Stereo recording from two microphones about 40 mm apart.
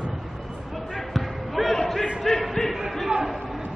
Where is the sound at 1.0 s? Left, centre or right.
Centre.